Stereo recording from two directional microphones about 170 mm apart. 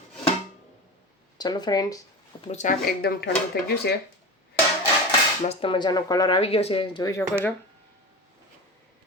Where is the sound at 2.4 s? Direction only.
45° left (ahead or behind).